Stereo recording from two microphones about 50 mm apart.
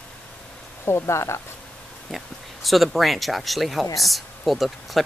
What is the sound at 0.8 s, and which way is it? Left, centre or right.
Speech, left.